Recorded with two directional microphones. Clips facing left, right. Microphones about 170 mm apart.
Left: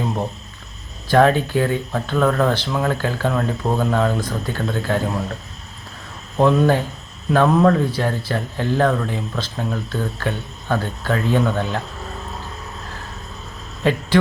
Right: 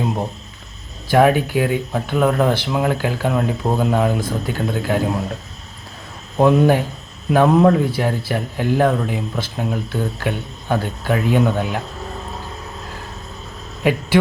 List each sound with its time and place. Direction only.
1.1 s speech: 15° right (ahead or behind)
6.3 s speech: 15° right (ahead or behind)
13.8 s speech: 15° right (ahead or behind)